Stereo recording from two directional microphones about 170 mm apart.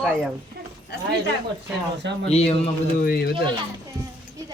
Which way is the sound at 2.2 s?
40° left (ahead or behind).